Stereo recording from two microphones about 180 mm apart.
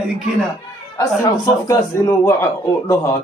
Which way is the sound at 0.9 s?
15° left (ahead or behind).